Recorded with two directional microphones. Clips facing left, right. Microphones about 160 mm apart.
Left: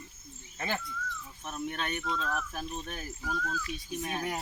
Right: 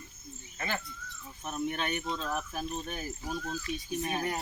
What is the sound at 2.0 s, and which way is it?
Speech, 30° right (ahead or behind).